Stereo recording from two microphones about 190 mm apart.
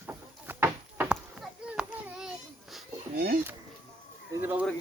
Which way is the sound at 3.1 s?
55° right (ahead or behind).